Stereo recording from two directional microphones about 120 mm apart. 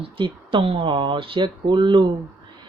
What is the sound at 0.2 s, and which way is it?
Speech, 50° right (ahead or behind).